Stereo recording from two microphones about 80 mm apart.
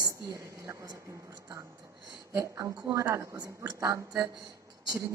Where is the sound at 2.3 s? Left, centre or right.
Right.